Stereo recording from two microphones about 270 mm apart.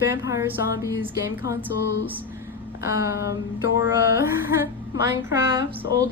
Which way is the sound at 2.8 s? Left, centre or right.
Centre.